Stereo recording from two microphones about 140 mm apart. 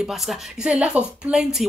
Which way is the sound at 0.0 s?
Centre (ahead or behind).